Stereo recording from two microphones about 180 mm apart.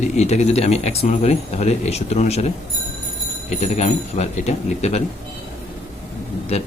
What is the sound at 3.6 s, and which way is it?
A man's voice, 40° left (ahead or behind).